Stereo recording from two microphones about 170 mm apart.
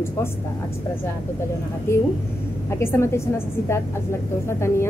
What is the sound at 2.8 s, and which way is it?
A woman's voice, 15° left (ahead or behind).